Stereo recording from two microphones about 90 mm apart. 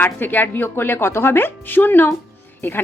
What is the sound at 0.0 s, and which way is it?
Speech, 20° left (ahead or behind).